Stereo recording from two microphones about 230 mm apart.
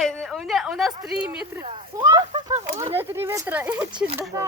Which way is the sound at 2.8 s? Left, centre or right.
Centre.